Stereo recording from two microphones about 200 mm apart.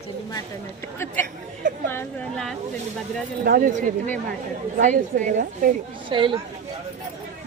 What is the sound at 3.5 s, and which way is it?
A woman's voice, 45° right (ahead or behind).